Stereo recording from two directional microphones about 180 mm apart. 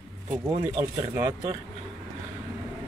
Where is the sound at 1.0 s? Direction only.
15° right (ahead or behind).